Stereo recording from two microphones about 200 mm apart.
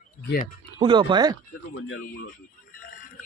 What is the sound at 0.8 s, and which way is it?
Speech, 25° right (ahead or behind).